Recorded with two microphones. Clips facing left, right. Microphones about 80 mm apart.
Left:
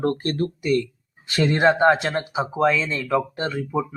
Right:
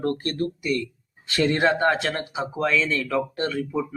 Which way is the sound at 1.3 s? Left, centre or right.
Left.